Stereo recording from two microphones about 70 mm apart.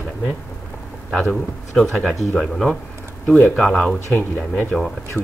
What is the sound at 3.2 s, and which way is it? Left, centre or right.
Speech, centre.